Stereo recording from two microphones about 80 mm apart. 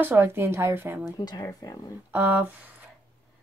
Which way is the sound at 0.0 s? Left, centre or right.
Right.